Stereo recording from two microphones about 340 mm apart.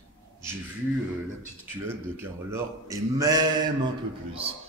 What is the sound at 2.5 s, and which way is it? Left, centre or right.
A man's voice, centre.